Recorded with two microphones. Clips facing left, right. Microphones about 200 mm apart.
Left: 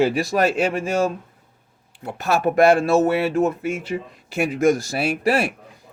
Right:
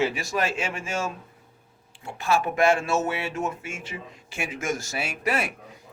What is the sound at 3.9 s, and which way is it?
Speech, 50° left (ahead or behind).